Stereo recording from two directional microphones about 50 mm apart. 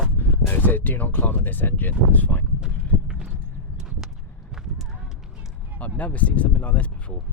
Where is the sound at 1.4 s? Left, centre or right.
Left.